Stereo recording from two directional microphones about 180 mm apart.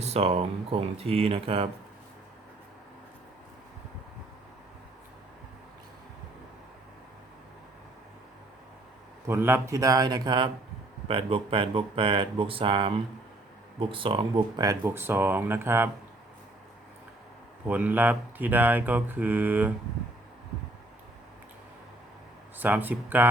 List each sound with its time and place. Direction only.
0.0 s speech: 35° right (ahead or behind)
9.2 s speech: 15° right (ahead or behind)
17.7 s speech: 10° right (ahead or behind)
22.5 s speech: 10° right (ahead or behind)